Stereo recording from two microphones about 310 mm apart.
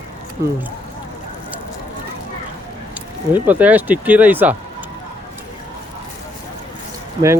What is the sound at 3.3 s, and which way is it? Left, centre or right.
Speech, centre.